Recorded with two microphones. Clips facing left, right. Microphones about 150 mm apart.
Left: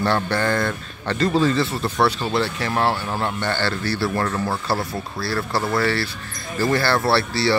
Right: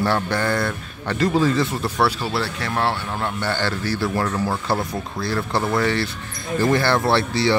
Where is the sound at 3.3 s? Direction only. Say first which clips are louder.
Even; 10° right (ahead or behind).